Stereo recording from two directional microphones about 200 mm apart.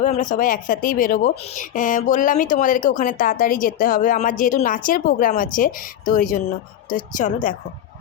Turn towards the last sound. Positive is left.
turn(degrees=40)  # may be behind; listen again after turning